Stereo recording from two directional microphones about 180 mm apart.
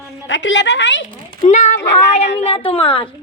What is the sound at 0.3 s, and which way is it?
Speech, 90° left.